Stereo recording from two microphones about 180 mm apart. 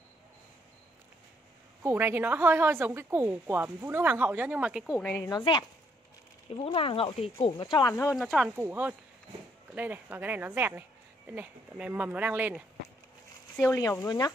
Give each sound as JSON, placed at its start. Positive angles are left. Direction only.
{"t": 1.8, "sound": "a woman's voice", "side_deg": -10}
{"t": 5.3, "sound": "speech", "side_deg": 25}
{"t": 8.2, "sound": "a woman's voice", "side_deg": 0}
{"t": 13.6, "sound": "speech", "side_deg": 10}